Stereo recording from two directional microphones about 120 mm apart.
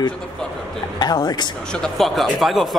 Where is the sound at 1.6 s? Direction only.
5° left (ahead or behind).